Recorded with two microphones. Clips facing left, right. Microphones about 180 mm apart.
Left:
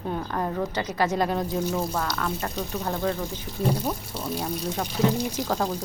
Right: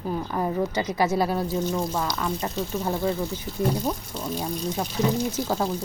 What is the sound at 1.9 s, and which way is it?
Speech, 10° right (ahead or behind).